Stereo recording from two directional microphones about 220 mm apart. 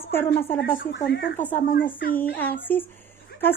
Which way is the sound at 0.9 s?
50° left (ahead or behind).